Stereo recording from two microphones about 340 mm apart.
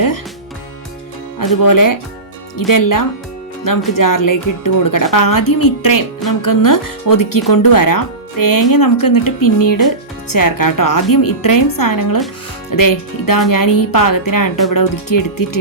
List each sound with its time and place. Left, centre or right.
1.6 s speech: left